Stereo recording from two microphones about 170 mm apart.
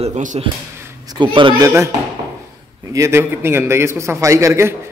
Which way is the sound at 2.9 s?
15° right (ahead or behind).